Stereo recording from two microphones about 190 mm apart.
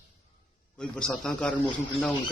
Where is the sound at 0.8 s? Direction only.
5° left (ahead or behind).